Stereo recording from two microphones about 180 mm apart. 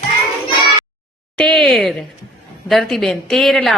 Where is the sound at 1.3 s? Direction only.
5° left (ahead or behind).